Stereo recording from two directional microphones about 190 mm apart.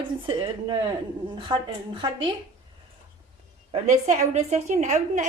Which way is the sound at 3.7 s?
35° right (ahead or behind).